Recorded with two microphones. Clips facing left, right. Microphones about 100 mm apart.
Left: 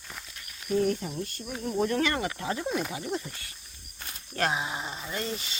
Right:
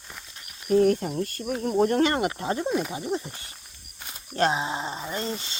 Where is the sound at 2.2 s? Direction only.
30° right (ahead or behind).